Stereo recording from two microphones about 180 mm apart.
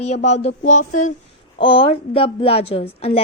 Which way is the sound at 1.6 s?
30° left (ahead or behind).